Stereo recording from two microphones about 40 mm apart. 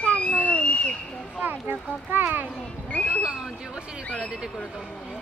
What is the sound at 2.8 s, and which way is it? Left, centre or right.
Speech, left.